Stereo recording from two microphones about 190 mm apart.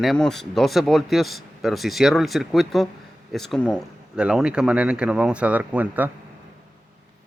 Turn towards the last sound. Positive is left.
turn(degrees=-10)  # may be behind; listen again after turning